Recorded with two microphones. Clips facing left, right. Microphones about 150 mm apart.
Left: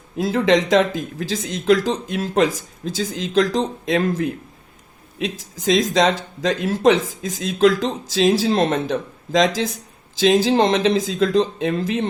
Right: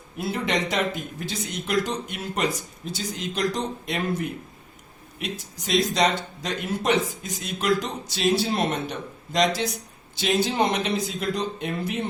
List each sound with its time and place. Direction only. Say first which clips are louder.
0.2 s speech: left 9 dB; 90° left